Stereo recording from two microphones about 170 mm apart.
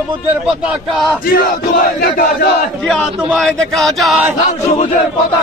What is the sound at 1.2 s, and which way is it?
Battle cry, 60° left (ahead or behind).